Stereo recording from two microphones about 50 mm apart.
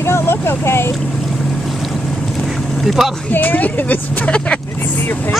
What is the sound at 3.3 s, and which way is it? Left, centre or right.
Speech, left.